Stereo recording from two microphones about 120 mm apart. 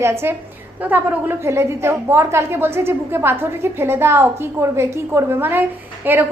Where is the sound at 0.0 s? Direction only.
20° right (ahead or behind).